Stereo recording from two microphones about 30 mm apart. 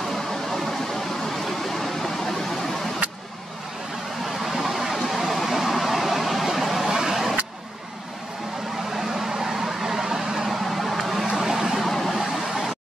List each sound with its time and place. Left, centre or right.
0.1 s vehicle: centre
4.4 s vehicle: centre
6.9 s vehicle: centre
8.9 s vehicle: centre
11.3 s vehicle: centre
11.8 s vehicle: centre
12.2 s a sound: centre